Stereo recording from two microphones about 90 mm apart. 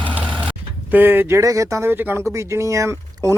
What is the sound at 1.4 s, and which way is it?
Speech, 35° right (ahead or behind).